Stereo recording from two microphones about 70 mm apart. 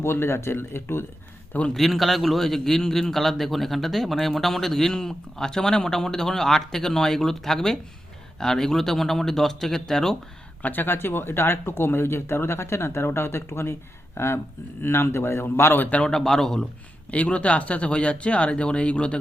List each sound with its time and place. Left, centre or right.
0.0 s speech: left
1.7 s a man's voice: centre
10.6 s speech: left
16.0 s speech: centre